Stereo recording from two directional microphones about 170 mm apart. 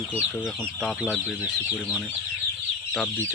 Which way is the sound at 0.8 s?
10° left (ahead or behind).